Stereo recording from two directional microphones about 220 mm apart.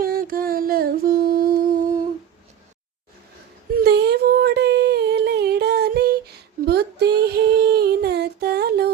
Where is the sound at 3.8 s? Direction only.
50° right (ahead or behind).